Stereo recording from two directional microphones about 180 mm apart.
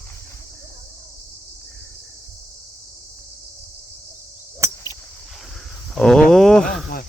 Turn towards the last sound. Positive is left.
turn(degrees=5)  # may be behind; listen again after turning